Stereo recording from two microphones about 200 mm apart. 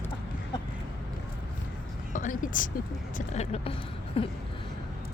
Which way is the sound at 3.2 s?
35° left (ahead or behind).